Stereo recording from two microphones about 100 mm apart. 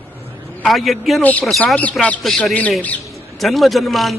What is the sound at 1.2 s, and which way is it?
Speech, 15° left (ahead or behind).